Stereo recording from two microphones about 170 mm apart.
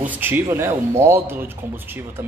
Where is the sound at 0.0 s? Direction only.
10° right (ahead or behind).